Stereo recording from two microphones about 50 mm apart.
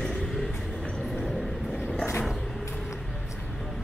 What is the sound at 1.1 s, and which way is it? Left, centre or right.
Train, centre.